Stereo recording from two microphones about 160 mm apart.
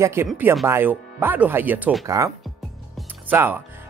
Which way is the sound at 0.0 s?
15° right (ahead or behind).